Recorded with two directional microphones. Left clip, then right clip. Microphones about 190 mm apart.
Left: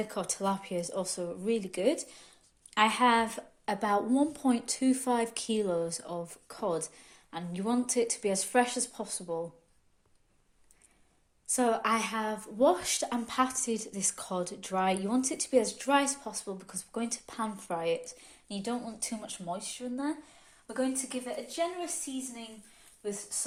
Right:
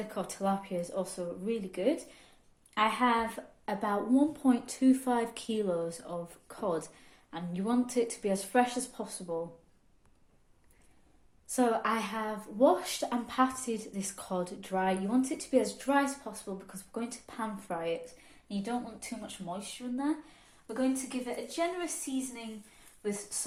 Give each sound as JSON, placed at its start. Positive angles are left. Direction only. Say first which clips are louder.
{"t": 0.1, "sound": "a woman's voice", "louder": "left 1 dB", "side_deg": 40}
{"t": 11.4, "sound": "a woman's voice", "louder": "left 1 dB", "side_deg": 30}
{"t": 23.0, "sound": "a woman's voice", "louder": "even", "side_deg": 35}